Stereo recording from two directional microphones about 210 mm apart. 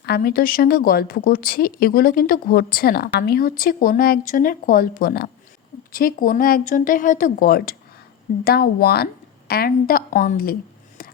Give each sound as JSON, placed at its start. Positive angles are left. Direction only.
{"t": 0.0, "sound": "a woman's voice", "side_deg": 50}